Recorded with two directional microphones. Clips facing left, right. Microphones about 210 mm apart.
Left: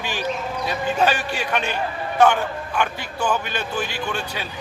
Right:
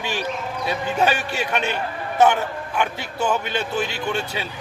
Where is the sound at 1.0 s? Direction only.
25° right (ahead or behind).